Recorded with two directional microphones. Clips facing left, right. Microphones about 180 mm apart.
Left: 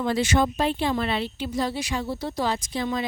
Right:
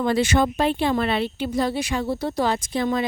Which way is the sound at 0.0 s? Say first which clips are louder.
Right 3 dB; 60° right (ahead or behind).